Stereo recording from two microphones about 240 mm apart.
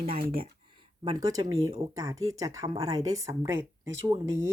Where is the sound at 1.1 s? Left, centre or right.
Centre.